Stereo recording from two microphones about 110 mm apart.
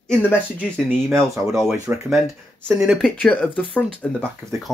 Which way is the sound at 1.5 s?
5° right (ahead or behind).